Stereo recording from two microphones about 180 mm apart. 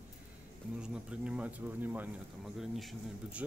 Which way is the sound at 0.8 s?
5° right (ahead or behind).